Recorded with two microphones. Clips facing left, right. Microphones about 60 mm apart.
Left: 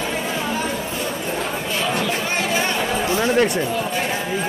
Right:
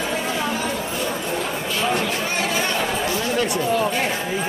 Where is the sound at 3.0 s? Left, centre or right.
Left.